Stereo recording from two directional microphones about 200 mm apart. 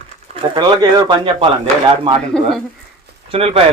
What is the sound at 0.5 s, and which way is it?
Speech, 20° right (ahead or behind).